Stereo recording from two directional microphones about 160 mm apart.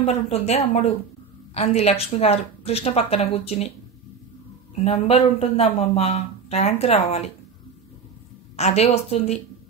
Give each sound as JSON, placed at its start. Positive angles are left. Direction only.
{"t": 0.0, "sound": "speech", "side_deg": 40}
{"t": 4.7, "sound": "speech", "side_deg": 40}
{"t": 8.5, "sound": "speech", "side_deg": 40}